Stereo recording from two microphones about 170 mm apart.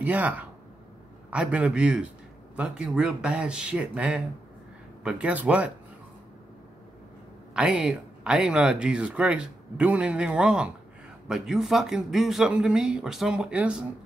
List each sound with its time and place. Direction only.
0.0 s a man's voice: 10° right (ahead or behind)
7.5 s speech: 5° right (ahead or behind)